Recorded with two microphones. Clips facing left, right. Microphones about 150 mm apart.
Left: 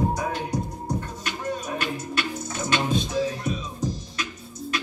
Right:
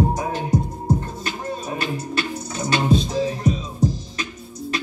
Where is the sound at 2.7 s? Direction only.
35° right (ahead or behind).